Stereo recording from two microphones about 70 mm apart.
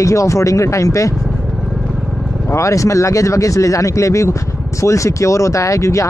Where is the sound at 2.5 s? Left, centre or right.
Left.